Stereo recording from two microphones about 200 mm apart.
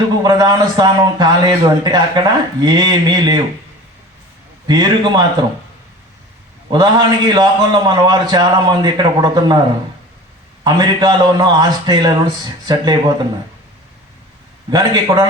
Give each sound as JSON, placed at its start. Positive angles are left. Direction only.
{"t": 0.2, "sound": "a man's voice", "side_deg": -20}
{"t": 4.6, "sound": "a man's voice", "side_deg": -20}
{"t": 6.7, "sound": "a man's voice", "side_deg": -20}
{"t": 14.7, "sound": "a man's voice", "side_deg": -20}